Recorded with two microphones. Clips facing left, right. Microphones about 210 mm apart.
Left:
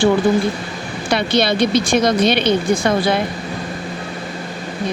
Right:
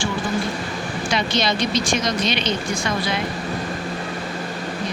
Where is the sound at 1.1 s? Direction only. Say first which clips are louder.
Left 6 dB; 60° left (ahead or behind).